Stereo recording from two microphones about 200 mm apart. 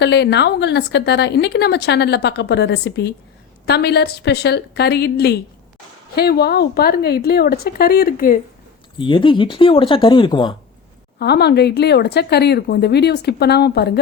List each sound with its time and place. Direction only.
0.0 s speech: 60° left (ahead or behind)
9.0 s speech: 25° left (ahead or behind)
11.2 s speech: 55° left (ahead or behind)